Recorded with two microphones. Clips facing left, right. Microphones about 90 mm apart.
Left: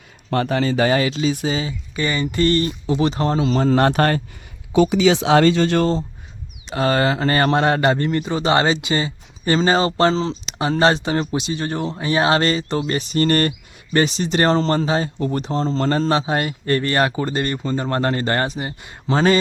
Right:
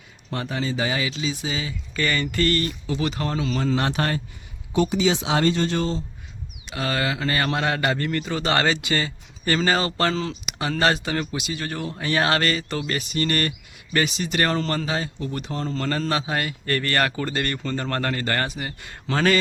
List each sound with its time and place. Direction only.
0.3 s speech: 65° left (ahead or behind); by 1.5 s 50° left (ahead or behind)
1.9 s a man's voice: 20° left (ahead or behind); by 4.2 s 55° left (ahead or behind)
4.7 s speech: 90° left
5.8 s a man's voice: 40° left (ahead or behind); by 19.4 s 25° left (ahead or behind)